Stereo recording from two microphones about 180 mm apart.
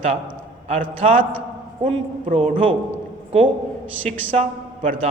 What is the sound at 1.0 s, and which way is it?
Speech, 40° right (ahead or behind).